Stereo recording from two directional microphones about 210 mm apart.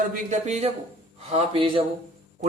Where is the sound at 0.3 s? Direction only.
30° right (ahead or behind).